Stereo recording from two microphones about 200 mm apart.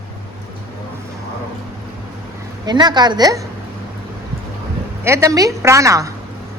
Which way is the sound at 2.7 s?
20° right (ahead or behind).